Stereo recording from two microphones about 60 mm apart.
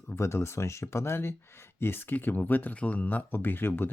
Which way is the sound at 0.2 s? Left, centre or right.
Left.